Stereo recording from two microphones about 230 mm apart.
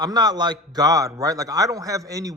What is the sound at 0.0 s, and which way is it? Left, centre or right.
A man's voice, centre.